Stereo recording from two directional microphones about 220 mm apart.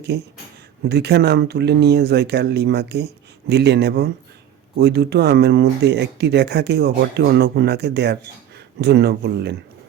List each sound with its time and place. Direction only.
0.1 s speech: 50° right (ahead or behind)